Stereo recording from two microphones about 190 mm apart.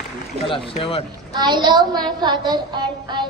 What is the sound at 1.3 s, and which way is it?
Speech, 20° right (ahead or behind).